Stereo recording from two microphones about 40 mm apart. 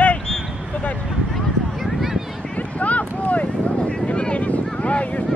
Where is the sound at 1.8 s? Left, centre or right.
Centre.